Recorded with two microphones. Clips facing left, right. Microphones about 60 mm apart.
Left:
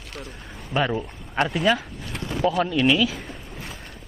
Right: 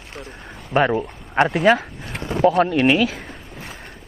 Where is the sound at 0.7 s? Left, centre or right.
Right.